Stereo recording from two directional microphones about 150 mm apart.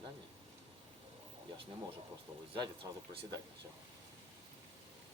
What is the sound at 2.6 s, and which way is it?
Speech, 30° right (ahead or behind).